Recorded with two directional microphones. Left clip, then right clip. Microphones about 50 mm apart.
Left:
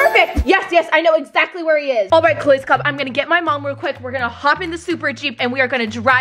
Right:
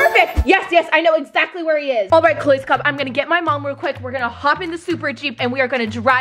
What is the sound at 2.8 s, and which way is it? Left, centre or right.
Speech, right.